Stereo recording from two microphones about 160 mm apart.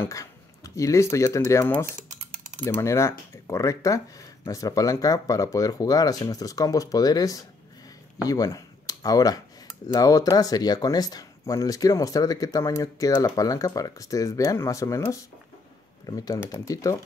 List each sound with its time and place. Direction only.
0.0 s speech: 20° left (ahead or behind)